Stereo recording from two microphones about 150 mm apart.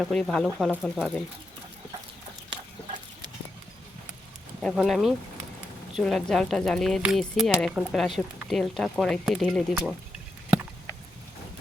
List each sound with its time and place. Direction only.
0.0 s speech: centre (ahead or behind)
4.6 s speech: centre (ahead or behind)